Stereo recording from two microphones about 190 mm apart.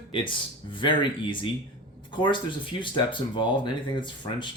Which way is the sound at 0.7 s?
25° left (ahead or behind).